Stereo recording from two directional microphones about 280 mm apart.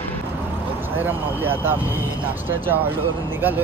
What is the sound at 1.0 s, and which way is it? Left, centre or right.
Speech, centre.